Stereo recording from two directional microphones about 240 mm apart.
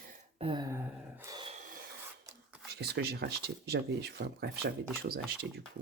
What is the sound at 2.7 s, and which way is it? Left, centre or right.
Speech, right.